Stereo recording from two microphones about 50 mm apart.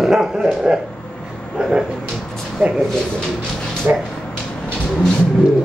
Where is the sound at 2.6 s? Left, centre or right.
Right.